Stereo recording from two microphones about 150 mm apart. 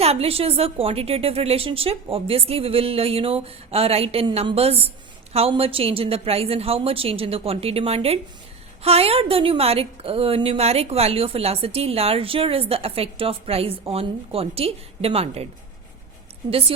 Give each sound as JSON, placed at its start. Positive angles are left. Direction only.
{"t": 0.0, "sound": "a woman's voice", "side_deg": -40}
{"t": 16.5, "sound": "a woman's voice", "side_deg": -40}